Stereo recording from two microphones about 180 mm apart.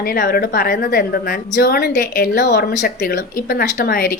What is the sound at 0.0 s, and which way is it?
A woman's voice, 55° left (ahead or behind).